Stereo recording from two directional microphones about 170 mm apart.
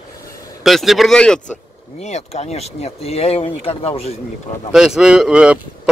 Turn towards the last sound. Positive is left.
turn(degrees=-5)  # may be behind; listen again after turning